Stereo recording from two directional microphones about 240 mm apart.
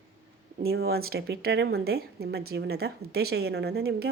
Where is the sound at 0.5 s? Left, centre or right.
Right.